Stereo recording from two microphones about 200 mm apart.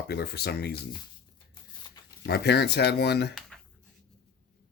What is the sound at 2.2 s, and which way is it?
Speech, 55° left (ahead or behind).